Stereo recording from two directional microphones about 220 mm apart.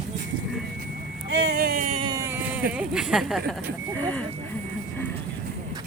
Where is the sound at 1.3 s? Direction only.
45° right (ahead or behind).